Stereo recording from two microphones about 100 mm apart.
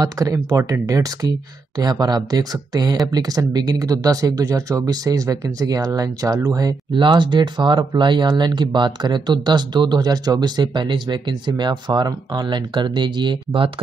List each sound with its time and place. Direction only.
0.0 s speech: 35° right (ahead or behind)
6.9 s speech: 55° right (ahead or behind)